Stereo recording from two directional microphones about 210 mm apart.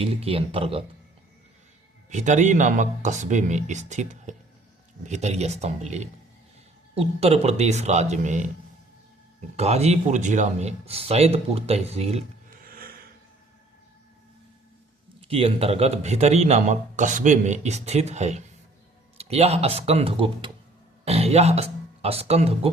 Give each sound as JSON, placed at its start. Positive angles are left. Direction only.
{"t": 0.0, "sound": "speech", "side_deg": -30}
{"t": 2.0, "sound": "a man's voice", "side_deg": -35}
{"t": 9.6, "sound": "a man's voice", "side_deg": -30}
{"t": 12.6, "sound": "a sound", "side_deg": -45}
{"t": 15.2, "sound": "a man's voice", "side_deg": -25}